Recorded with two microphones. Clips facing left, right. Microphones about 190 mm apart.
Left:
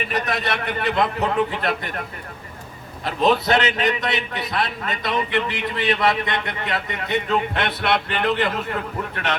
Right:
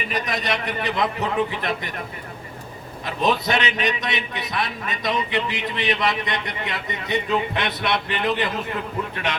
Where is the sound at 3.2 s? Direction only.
15° right (ahead or behind).